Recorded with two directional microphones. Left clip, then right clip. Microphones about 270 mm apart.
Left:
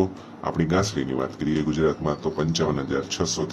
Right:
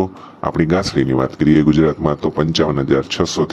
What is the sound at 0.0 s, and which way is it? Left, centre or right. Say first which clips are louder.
A man's voice: right 5 dB; right.